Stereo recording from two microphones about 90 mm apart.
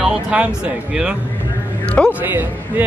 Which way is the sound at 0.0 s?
10° right (ahead or behind).